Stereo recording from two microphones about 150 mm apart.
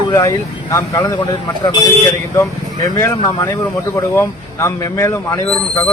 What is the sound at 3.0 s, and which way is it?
Speech, 20° left (ahead or behind).